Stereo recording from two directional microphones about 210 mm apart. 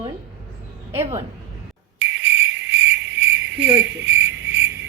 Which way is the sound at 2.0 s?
60° right (ahead or behind).